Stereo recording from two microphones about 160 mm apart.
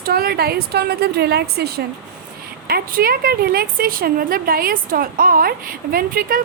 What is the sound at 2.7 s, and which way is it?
A woman's voice, 65° right (ahead or behind).